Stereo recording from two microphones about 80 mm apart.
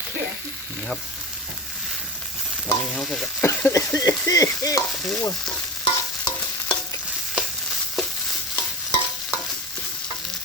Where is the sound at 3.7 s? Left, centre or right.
Left.